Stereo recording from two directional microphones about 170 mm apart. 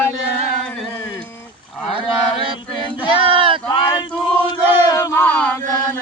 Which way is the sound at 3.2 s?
30° right (ahead or behind).